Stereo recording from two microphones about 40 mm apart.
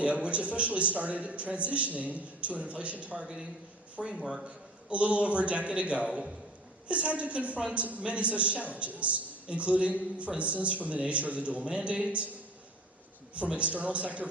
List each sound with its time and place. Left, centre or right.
0.0 s a woman's voice: right
4.0 s speech: centre
4.4 s a woman's voice: right
13.3 s a woman's voice: right